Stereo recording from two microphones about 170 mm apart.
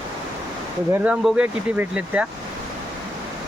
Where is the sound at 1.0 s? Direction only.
5° right (ahead or behind).